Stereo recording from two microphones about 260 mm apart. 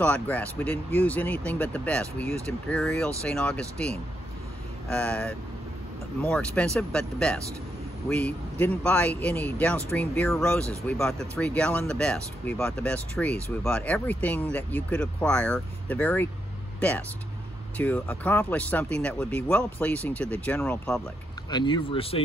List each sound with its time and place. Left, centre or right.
0.0 s speech: centre
17.7 s speech: centre
21.5 s speech: centre